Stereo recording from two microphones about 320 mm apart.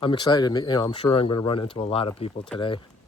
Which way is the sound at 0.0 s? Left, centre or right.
Centre.